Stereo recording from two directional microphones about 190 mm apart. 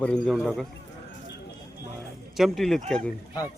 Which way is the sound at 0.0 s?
Centre (ahead or behind).